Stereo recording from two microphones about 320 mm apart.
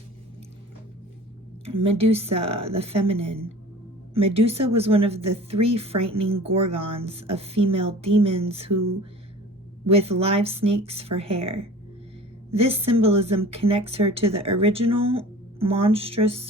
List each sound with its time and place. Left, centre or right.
1.6 s speech: centre
9.8 s a woman's voice: centre